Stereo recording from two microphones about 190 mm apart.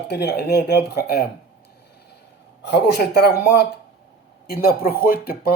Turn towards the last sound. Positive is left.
turn(degrees=55)  # may be behind; listen again after turning